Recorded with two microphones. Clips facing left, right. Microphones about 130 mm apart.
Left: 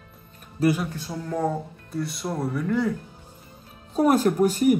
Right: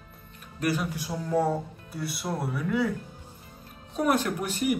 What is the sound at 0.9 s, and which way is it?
A man's voice, 10° right (ahead or behind).